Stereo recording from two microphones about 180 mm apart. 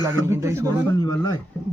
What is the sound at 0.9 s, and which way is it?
Speech, 20° left (ahead or behind).